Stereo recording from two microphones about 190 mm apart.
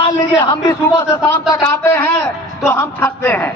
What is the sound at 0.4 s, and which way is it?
Speech, 20° left (ahead or behind).